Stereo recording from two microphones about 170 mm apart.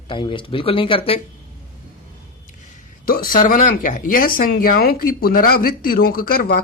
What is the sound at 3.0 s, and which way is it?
A man's voice, 55° left (ahead or behind).